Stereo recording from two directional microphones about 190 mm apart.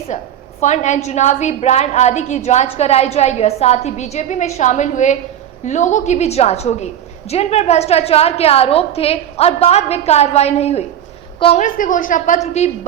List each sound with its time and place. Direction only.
0.1 s a woman's voice: 40° left (ahead or behind)
11.6 s speech: 45° left (ahead or behind)